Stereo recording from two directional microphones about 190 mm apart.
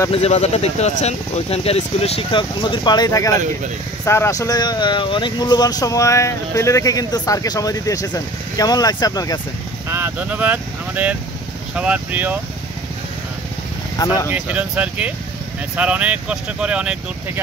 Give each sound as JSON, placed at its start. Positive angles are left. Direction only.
{"t": 0.1, "sound": "speech", "side_deg": 35}
{"t": 9.8, "sound": "speech", "side_deg": -10}
{"t": 13.9, "sound": "speech", "side_deg": 20}
{"t": 14.3, "sound": "speech", "side_deg": -5}